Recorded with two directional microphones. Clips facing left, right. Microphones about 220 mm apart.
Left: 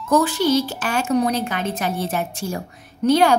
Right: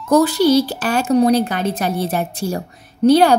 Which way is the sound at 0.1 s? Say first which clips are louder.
Right 5 dB; 40° right (ahead or behind).